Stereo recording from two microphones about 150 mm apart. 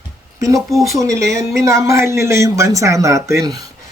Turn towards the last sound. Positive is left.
turn(degrees=-20)  # may be behind; listen again after turning